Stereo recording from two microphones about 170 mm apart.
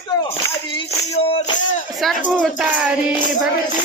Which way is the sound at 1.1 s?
35° left (ahead or behind).